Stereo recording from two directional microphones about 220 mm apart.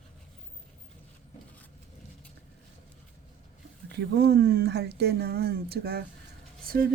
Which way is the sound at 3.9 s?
50° right (ahead or behind).